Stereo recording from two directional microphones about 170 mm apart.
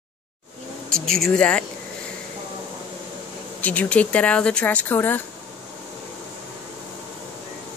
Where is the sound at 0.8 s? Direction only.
5° left (ahead or behind).